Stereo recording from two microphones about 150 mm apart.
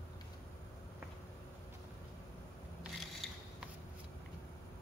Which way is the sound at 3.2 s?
Centre (ahead or behind).